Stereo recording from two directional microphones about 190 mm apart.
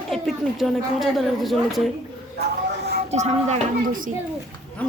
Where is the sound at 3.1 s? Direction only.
35° right (ahead or behind).